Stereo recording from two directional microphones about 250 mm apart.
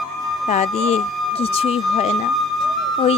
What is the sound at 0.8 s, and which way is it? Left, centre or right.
Speech, left.